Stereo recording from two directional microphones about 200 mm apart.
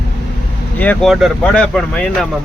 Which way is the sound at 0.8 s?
10° left (ahead or behind).